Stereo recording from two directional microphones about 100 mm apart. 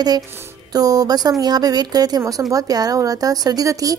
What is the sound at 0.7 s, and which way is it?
A woman's voice, 40° right (ahead or behind).